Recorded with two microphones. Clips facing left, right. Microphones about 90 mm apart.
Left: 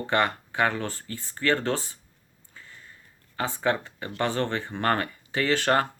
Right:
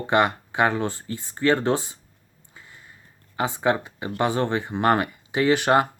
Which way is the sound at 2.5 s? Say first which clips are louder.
Right 1 dB; 15° right (ahead or behind).